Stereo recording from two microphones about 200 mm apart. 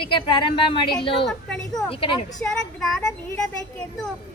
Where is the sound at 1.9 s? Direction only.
25° left (ahead or behind).